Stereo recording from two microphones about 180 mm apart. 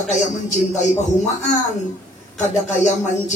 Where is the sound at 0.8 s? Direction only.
40° left (ahead or behind).